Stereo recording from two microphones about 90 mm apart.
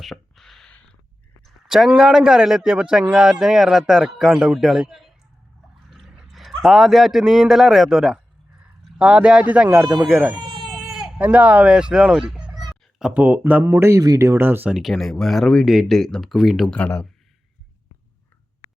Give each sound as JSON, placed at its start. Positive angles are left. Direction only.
{"t": 0.0, "sound": "a sound", "side_deg": 0}
{"t": 2.0, "sound": "a man's voice", "side_deg": -5}
{"t": 10.5, "sound": "a sound", "side_deg": 5}
{"t": 11.2, "sound": "speech", "side_deg": -15}
{"t": 13.7, "sound": "speech", "side_deg": -30}
{"t": 14.7, "sound": "a man's voice", "side_deg": 0}
{"t": 16.6, "sound": "speech", "side_deg": 15}